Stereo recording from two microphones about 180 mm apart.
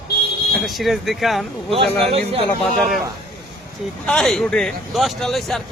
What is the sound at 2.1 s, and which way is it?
Speech, 35° right (ahead or behind).